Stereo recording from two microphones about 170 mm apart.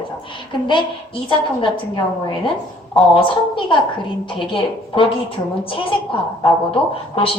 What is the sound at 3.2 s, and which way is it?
A woman's voice, 30° left (ahead or behind).